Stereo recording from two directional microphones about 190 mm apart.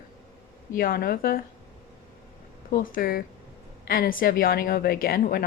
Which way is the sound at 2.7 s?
45° left (ahead or behind).